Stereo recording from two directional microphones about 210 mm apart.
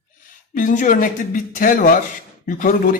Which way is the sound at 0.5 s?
40° left (ahead or behind).